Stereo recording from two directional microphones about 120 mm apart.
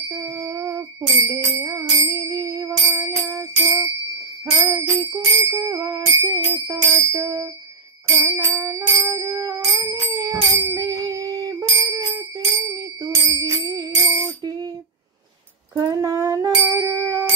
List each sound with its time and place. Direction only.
0.1 s a sound: 20° right (ahead or behind)
1.2 s music: 25° right (ahead or behind)
4.6 s bicycle bell: 25° right (ahead or behind)
5.1 s music: 25° right (ahead or behind)
11.9 s jingle bell: 25° right (ahead or behind)
15.7 s ding: 30° right (ahead or behind)